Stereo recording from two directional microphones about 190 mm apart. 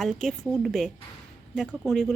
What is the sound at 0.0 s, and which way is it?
Speech, centre (ahead or behind).